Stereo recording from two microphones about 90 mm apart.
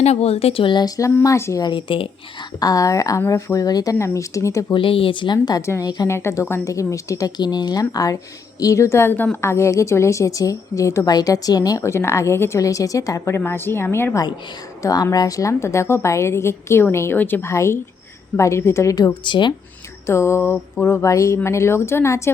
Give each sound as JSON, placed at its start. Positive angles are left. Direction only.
{"t": 0.3, "sound": "speech", "side_deg": 90}
{"t": 1.2, "sound": "a woman's voice", "side_deg": 35}
{"t": 1.6, "sound": "speech", "side_deg": 70}
{"t": 2.6, "sound": "a woman's voice", "side_deg": 40}
{"t": 3.9, "sound": "a woman's voice", "side_deg": 30}
{"t": 4.7, "sound": "speech", "side_deg": 75}
{"t": 5.6, "sound": "a woman's voice", "side_deg": 30}
{"t": 11.1, "sound": "a woman's voice", "side_deg": 45}
{"t": 11.8, "sound": "a woman's voice", "side_deg": 30}
{"t": 14.8, "sound": "a woman's voice", "side_deg": 40}
{"t": 17.5, "sound": "a woman's voice", "side_deg": 30}
{"t": 19.2, "sound": "speech", "side_deg": 60}
{"t": 20.1, "sound": "a woman's voice", "side_deg": 30}